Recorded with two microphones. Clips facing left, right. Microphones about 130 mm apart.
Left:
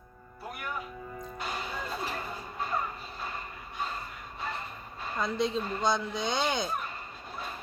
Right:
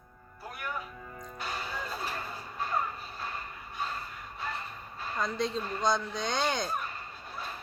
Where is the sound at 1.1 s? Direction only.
10° left (ahead or behind).